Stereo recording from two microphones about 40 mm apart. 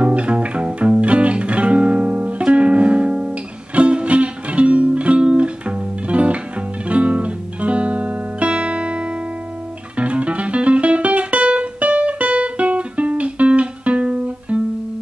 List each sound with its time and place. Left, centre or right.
0.0 s music: right